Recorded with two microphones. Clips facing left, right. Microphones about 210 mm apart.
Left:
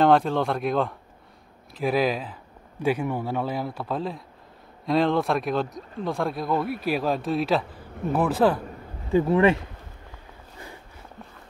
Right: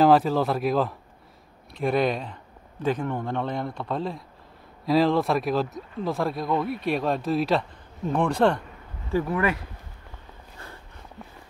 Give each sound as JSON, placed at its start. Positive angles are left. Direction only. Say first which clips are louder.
{"t": 0.0, "sound": "speech", "louder": "right 1 dB", "side_deg": -5}
{"t": 9.1, "sound": "speech", "louder": "left 5 dB", "side_deg": 25}